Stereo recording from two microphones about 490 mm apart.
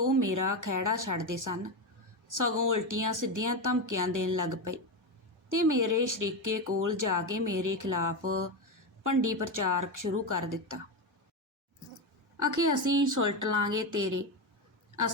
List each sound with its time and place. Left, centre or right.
0.0 s speech: right
9.0 s speech: right
12.4 s speech: right